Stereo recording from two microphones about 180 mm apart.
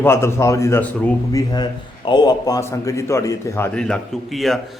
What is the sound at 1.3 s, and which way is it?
A man's voice, 25° left (ahead or behind).